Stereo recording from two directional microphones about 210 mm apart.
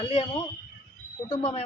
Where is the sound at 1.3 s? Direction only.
35° left (ahead or behind).